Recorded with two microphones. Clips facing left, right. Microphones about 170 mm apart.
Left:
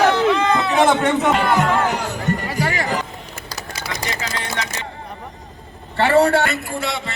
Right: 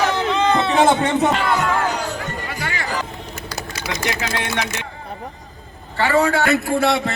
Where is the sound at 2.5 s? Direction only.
35° left (ahead or behind).